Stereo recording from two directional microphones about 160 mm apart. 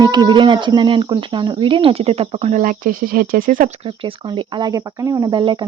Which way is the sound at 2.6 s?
60° right (ahead or behind).